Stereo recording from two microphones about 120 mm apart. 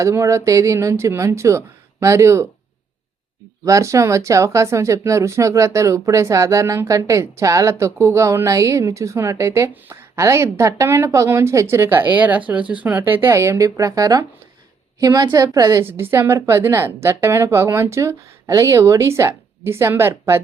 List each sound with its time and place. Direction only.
0.0 s speech: 25° right (ahead or behind)
3.6 s a woman's voice: 25° right (ahead or behind)
15.8 s speech: 20° right (ahead or behind)